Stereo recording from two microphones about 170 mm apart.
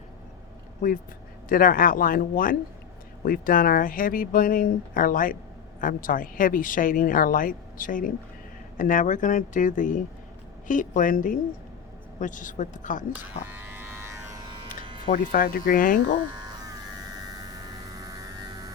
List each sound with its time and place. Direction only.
0.8 s a woman's voice: 55° left (ahead or behind)
13.5 s music: 10° right (ahead or behind)
15.0 s speech: 55° left (ahead or behind)
17.1 s a sound: 25° right (ahead or behind)